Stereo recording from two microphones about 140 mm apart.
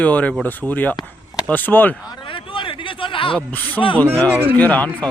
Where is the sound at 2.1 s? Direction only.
35° left (ahead or behind).